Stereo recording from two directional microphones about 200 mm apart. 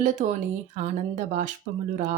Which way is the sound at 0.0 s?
40° right (ahead or behind).